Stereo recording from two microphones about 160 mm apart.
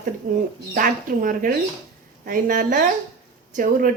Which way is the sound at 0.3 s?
55° right (ahead or behind).